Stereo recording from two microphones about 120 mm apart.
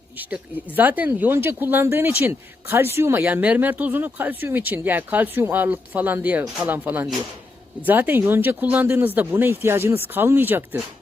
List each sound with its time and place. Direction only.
0.8 s speech: 15° right (ahead or behind)